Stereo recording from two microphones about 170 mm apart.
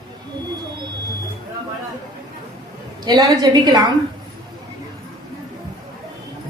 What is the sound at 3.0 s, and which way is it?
Speech, 20° right (ahead or behind).